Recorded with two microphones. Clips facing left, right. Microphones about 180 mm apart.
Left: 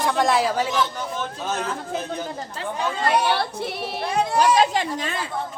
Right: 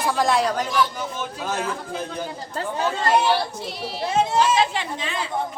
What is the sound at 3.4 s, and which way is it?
Speech, 60° left (ahead or behind).